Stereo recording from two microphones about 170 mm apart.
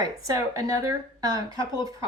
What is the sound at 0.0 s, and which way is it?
A woman's voice, 20° right (ahead or behind).